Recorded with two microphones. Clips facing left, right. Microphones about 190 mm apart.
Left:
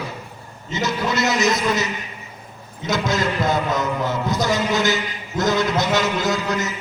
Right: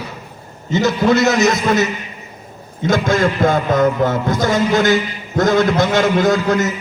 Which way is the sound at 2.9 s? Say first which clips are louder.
Right 6 dB; 50° right (ahead or behind).